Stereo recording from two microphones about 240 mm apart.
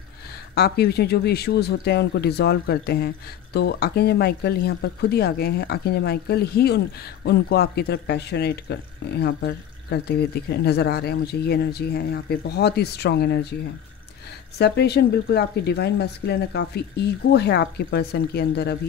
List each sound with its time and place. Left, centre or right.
0.6 s speech: left
14.6 s speech: left